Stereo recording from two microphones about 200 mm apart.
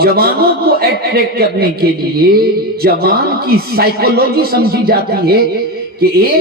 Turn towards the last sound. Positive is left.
turn(degrees=-50)  # may be behind; listen again after turning